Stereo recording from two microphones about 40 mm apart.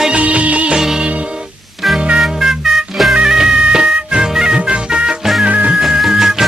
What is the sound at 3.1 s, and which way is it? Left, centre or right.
Music, centre.